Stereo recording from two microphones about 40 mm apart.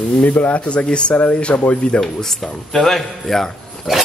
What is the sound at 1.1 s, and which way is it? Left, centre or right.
Speech, left.